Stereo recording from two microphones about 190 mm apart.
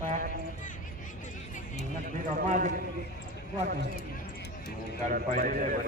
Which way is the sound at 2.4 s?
40° right (ahead or behind).